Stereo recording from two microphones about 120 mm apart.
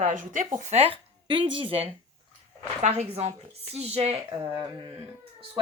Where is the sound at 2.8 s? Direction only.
65° right (ahead or behind).